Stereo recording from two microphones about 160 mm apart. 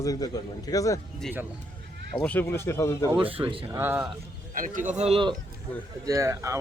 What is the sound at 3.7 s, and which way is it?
Speech, 15° right (ahead or behind).